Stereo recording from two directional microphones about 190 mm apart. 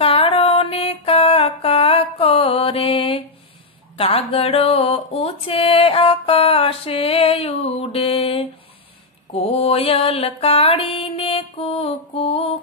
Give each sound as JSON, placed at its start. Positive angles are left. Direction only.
{"t": 0.0, "sound": "mantra", "side_deg": 30}
{"t": 3.9, "sound": "a sound", "side_deg": 30}
{"t": 9.3, "sound": "mantra", "side_deg": 30}